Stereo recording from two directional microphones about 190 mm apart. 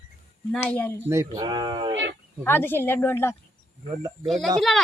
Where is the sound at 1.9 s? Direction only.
70° right (ahead or behind).